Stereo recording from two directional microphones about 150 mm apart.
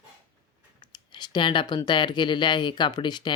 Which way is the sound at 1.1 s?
30° left (ahead or behind).